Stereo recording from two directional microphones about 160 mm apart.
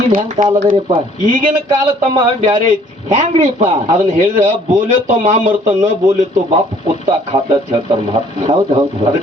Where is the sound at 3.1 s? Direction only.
45° right (ahead or behind).